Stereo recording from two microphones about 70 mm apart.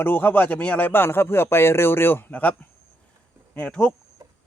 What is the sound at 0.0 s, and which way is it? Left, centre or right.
Speech, left.